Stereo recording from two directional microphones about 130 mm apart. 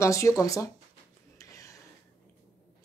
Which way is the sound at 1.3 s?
25° left (ahead or behind).